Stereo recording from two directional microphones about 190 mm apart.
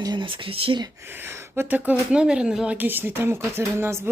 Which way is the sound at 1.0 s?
10° right (ahead or behind).